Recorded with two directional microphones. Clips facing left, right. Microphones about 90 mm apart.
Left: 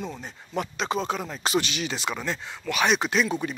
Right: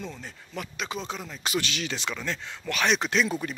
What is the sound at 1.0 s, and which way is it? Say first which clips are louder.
Speech: left 6 dB; 50° left (ahead or behind).